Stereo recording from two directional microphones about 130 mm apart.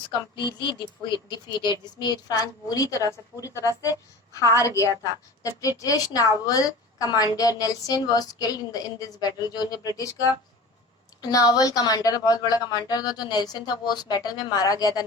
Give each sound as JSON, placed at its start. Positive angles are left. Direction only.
{"t": 0.3, "sound": "a woman's voice", "side_deg": 35}
{"t": 11.2, "sound": "a woman's voice", "side_deg": 30}